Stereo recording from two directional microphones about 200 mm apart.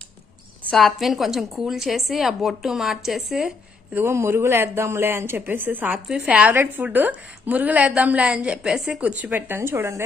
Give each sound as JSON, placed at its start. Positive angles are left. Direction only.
{"t": 0.7, "sound": "a woman's voice", "side_deg": 0}